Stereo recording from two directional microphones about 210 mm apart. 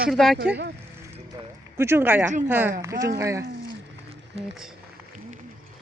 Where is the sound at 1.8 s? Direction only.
10° right (ahead or behind).